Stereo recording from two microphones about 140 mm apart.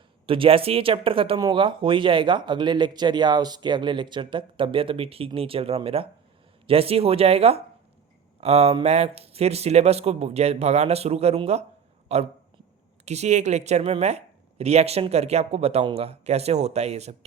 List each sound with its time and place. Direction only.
0.3 s speech: 40° right (ahead or behind)